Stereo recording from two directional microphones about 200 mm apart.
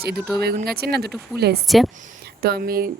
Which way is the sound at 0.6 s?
50° right (ahead or behind).